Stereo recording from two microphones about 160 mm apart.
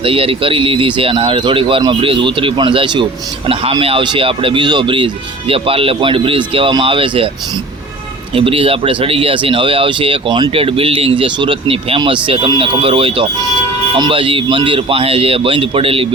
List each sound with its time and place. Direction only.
0.0 s speech: 35° right (ahead or behind)
8.4 s speech: 35° right (ahead or behind)